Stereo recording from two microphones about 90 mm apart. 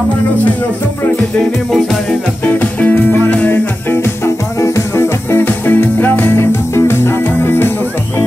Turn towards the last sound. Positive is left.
turn(degrees=25)  # may be behind; listen again after turning